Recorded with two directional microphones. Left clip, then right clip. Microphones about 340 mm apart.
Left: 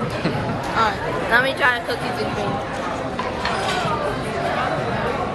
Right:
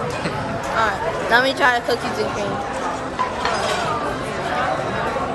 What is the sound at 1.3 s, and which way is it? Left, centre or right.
Speech, right.